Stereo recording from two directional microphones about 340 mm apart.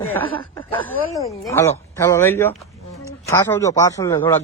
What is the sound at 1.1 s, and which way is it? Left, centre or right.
A man's voice, centre.